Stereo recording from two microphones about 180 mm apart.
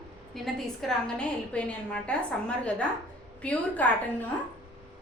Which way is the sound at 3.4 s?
10° left (ahead or behind).